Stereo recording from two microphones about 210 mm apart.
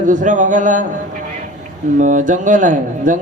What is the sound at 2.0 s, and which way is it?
A man's voice, 35° right (ahead or behind).